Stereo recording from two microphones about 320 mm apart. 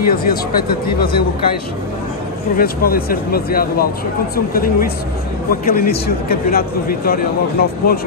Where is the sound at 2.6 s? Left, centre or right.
Left.